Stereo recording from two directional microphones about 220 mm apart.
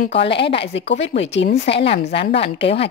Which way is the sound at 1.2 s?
55° left (ahead or behind).